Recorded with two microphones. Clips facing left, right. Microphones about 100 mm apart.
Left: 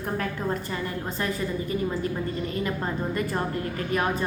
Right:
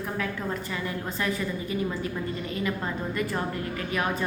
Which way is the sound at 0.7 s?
40° left (ahead or behind).